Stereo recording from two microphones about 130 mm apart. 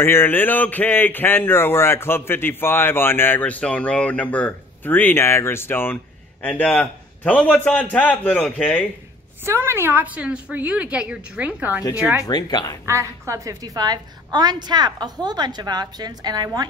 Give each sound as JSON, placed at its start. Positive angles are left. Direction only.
{"t": 0.0, "sound": "a man's voice", "side_deg": 15}
{"t": 9.4, "sound": "a woman's voice", "side_deg": -15}
{"t": 11.8, "sound": "speech", "side_deg": 30}
{"t": 12.8, "sound": "a woman's voice", "side_deg": -20}